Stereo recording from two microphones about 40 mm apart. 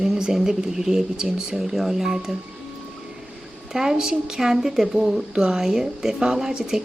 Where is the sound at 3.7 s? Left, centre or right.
Centre.